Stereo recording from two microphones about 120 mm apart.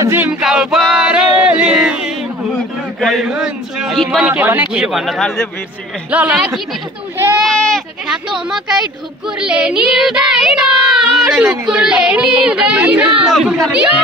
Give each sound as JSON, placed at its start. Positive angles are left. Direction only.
{"t": 0.0, "sound": "music", "side_deg": -20}
{"t": 0.3, "sound": "a sound", "side_deg": -5}
{"t": 3.0, "sound": "a man's voice", "side_deg": 0}
{"t": 4.3, "sound": "a man's voice", "side_deg": -15}
{"t": 6.0, "sound": "child singing", "side_deg": -10}
{"t": 7.4, "sound": "goat", "side_deg": 5}
{"t": 8.1, "sound": "a man's voice", "side_deg": -5}
{"t": 9.4, "sound": "child singing", "side_deg": -10}